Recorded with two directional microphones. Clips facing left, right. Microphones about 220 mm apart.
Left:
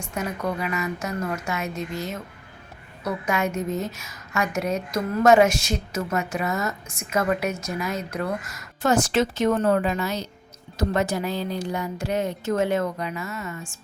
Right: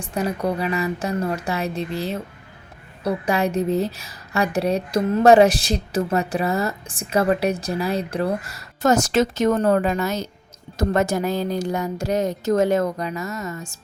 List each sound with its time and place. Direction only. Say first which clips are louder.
0.0 s a woman's voice: right 5 dB; 35° right (ahead or behind)